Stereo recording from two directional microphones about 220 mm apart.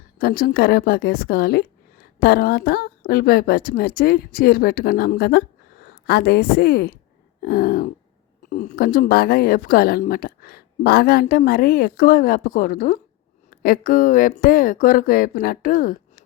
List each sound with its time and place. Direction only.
0.2 s a woman's voice: 40° left (ahead or behind)